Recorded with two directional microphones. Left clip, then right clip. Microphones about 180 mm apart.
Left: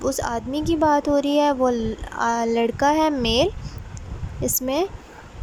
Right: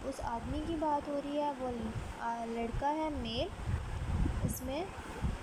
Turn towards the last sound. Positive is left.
turn(degrees=60)  # may be behind; listen again after turning